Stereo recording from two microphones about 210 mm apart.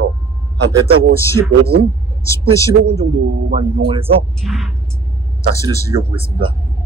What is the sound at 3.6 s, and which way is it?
Speech, 25° right (ahead or behind).